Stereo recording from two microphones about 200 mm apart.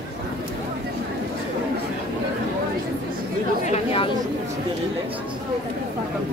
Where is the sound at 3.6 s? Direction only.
30° left (ahead or behind).